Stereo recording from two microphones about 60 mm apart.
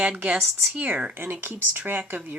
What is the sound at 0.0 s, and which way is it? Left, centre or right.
Speech, right.